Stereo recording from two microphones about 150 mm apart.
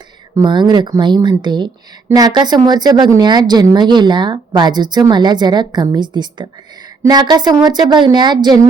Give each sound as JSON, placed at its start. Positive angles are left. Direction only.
{"t": 0.3, "sound": "speech", "side_deg": -30}